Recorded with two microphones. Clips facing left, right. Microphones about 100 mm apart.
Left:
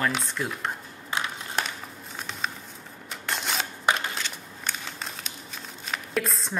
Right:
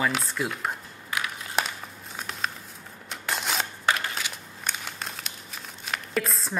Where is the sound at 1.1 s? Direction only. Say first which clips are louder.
Left 1 dB; 25° left (ahead or behind).